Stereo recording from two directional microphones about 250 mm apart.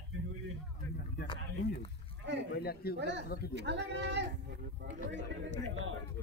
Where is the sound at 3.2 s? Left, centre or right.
Left.